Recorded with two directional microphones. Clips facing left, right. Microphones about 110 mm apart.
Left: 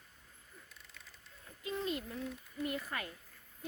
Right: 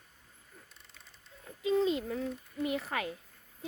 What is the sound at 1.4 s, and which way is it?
Speech, 90° right.